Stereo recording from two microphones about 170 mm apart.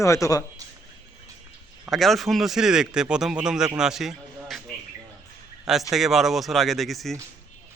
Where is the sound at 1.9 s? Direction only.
Centre (ahead or behind).